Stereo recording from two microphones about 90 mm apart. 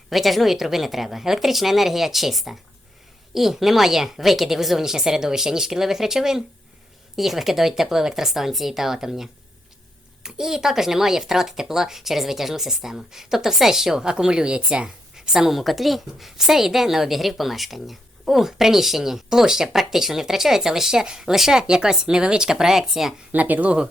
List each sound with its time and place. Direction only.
0.1 s speech: centre (ahead or behind)
23.3 s speech: 20° right (ahead or behind)